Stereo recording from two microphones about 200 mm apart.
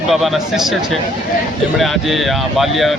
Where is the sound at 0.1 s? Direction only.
Centre (ahead or behind).